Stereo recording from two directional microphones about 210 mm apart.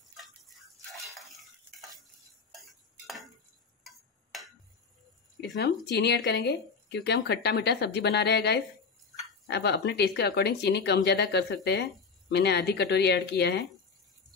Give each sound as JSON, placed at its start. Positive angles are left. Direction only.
{"t": 0.1, "sound": "stir", "side_deg": 0}
{"t": 2.6, "sound": "tick-tock", "side_deg": 0}
{"t": 3.8, "sound": "a sound", "side_deg": 0}
{"t": 5.4, "sound": "speech", "side_deg": 55}